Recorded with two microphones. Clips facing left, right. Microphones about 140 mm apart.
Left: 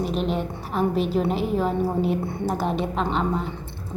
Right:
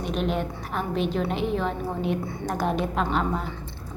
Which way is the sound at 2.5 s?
Centre (ahead or behind).